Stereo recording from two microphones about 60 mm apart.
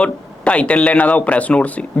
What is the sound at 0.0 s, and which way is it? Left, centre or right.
Speech, left.